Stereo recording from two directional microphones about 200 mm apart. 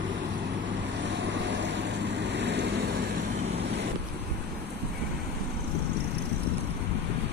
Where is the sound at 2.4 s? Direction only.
60° right (ahead or behind).